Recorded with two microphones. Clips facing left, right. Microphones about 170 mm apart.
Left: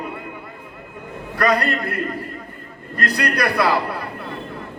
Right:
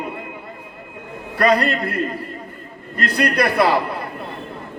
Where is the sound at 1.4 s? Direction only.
30° right (ahead or behind).